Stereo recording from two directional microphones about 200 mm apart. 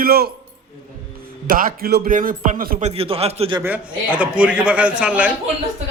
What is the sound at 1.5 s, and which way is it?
Speech, 45° right (ahead or behind).